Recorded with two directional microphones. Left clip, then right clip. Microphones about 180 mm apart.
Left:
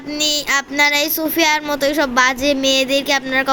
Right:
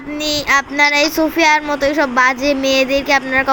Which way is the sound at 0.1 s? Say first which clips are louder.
Right 2 dB; centre (ahead or behind).